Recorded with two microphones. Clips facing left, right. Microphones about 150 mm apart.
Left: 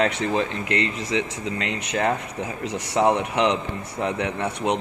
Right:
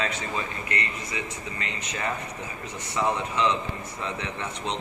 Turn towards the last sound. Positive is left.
turn(degrees=65)  # may be behind; listen again after turning